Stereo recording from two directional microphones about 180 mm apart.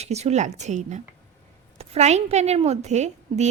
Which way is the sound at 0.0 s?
35° right (ahead or behind).